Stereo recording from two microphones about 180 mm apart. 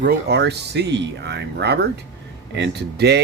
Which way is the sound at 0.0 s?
60° right (ahead or behind).